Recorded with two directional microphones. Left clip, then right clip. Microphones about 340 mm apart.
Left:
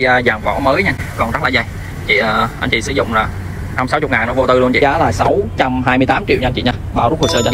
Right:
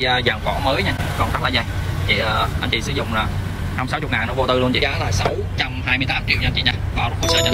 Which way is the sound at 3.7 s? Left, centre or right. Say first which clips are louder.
Left 8 dB; centre.